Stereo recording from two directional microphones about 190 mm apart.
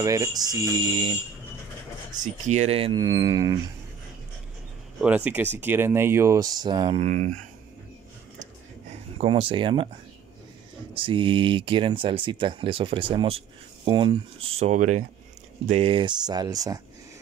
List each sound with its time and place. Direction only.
0.0 s speech: 15° right (ahead or behind)
2.4 s speech: 35° right (ahead or behind); by 3.5 s 20° right (ahead or behind)
5.0 s speech: 10° right (ahead or behind); by 7.3 s 40° right (ahead or behind)
9.2 s speech: 30° right (ahead or behind)
11.0 s speech: 25° right (ahead or behind)